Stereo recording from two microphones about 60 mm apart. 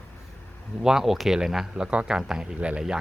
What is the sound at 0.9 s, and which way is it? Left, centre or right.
Speech, centre.